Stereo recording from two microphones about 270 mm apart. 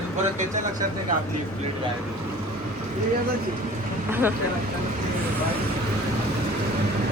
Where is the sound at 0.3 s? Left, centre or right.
Right.